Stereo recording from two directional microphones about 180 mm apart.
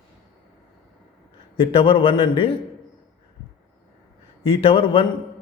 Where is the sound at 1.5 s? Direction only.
30° left (ahead or behind).